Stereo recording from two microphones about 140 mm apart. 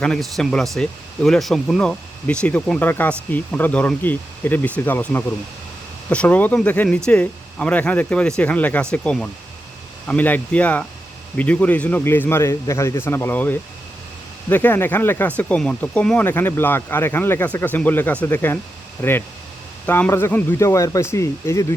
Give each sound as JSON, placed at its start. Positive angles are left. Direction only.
{"t": 0.0, "sound": "speech", "side_deg": 5}